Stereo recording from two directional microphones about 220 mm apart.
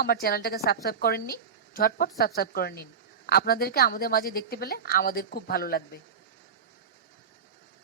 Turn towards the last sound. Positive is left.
turn(degrees=45)  # may be behind; listen again after turning